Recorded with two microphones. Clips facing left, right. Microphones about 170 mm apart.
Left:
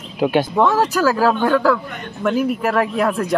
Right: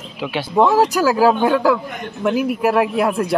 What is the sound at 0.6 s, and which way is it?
Speech, 15° right (ahead or behind).